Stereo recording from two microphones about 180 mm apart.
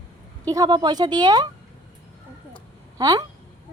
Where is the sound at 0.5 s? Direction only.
25° right (ahead or behind).